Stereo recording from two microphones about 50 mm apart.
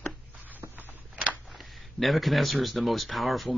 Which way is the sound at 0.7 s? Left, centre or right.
Right.